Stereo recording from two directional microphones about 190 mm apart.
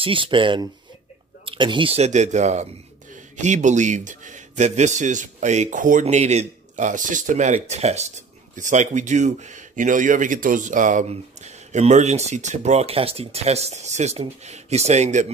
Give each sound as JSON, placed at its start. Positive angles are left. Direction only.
{"t": 0.0, "sound": "speech", "side_deg": -25}